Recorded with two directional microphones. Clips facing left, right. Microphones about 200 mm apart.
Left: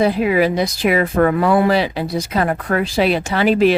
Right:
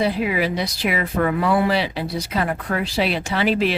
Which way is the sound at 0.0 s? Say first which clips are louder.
Left 6 dB; 50° left (ahead or behind).